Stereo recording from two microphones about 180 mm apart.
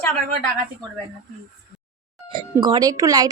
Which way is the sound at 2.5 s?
20° right (ahead or behind).